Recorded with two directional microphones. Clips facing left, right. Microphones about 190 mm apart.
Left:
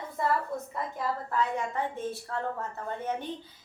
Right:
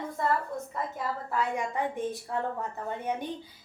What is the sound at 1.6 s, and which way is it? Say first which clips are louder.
A woman's voice: right 1 dB; 15° right (ahead or behind).